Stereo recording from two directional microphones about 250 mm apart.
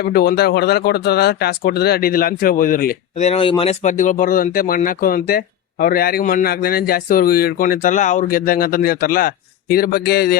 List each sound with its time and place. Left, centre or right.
0.0 s speech: left